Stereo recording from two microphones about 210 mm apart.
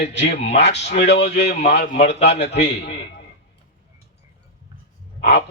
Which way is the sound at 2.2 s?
55° left (ahead or behind).